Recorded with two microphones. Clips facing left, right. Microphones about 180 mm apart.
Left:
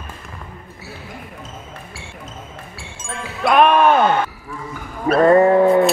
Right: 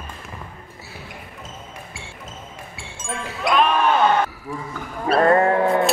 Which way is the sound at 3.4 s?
55° left (ahead or behind).